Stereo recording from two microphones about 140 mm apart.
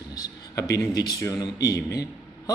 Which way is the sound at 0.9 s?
25° left (ahead or behind).